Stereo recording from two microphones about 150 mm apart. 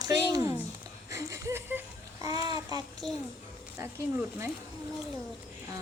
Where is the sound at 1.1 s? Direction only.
20° right (ahead or behind).